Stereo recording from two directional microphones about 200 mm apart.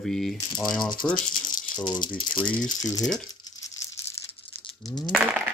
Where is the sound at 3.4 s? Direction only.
15° left (ahead or behind).